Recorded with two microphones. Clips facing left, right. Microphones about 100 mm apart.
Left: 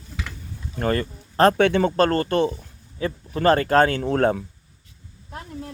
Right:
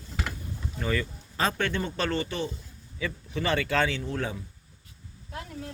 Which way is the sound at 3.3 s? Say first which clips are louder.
Left 9 dB; 45° left (ahead or behind).